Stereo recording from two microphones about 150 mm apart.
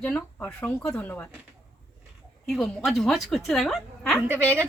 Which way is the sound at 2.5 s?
Centre (ahead or behind).